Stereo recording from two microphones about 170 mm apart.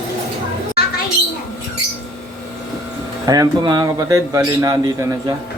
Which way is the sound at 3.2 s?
20° right (ahead or behind).